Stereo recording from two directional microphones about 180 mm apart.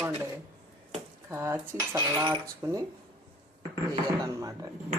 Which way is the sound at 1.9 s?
20° right (ahead or behind).